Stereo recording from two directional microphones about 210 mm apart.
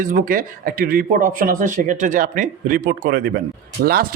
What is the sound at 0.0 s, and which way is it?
Speech, 40° right (ahead or behind).